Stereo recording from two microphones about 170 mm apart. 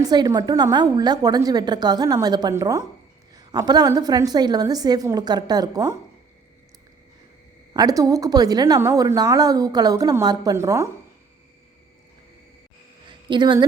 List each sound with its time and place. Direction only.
0.0 s a woman's voice: 20° right (ahead or behind)
7.7 s a woman's voice: 20° right (ahead or behind)
13.1 s a sound: 25° right (ahead or behind)